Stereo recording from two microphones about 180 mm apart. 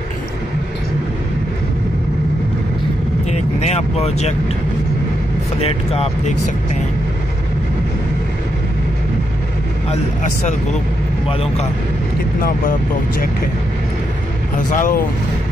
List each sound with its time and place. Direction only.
3.3 s speech: 40° left (ahead or behind)
5.6 s speech: 35° left (ahead or behind)
12.4 s speech: 50° left (ahead or behind)
14.7 s speech: 45° left (ahead or behind)